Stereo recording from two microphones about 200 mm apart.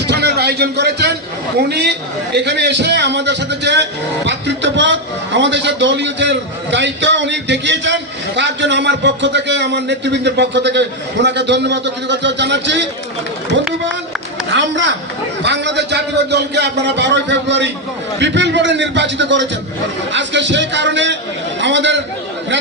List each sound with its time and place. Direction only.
0.1 s a sound: 55° right (ahead or behind)
1.7 s a man's voice: 55° right (ahead or behind)
14.5 s a man's voice: 65° right (ahead or behind)